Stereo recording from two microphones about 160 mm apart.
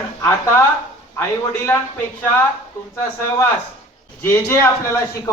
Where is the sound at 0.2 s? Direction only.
20° left (ahead or behind).